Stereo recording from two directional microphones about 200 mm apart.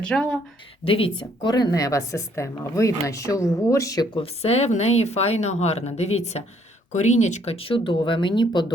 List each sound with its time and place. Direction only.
0.0 s speech: 5° left (ahead or behind)
0.9 s speech: 25° left (ahead or behind)